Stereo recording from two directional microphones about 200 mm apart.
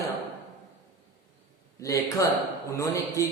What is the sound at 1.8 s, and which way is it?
Speech, 15° left (ahead or behind).